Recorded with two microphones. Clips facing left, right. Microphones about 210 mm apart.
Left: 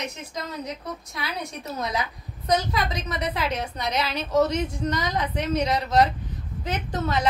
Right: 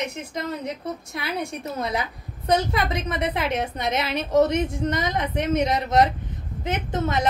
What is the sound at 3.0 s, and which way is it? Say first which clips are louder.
A woman's voice: right 2 dB; 25° right (ahead or behind).